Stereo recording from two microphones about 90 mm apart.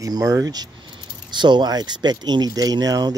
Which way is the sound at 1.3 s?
55° right (ahead or behind).